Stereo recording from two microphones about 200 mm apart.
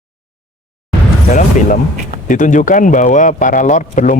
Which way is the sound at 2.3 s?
40° left (ahead or behind).